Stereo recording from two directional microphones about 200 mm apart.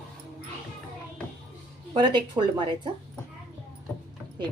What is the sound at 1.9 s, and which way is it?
Speech, 25° right (ahead or behind).